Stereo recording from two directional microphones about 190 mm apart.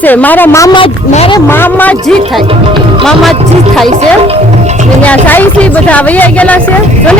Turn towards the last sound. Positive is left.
turn(degrees=10)  # may be behind; listen again after turning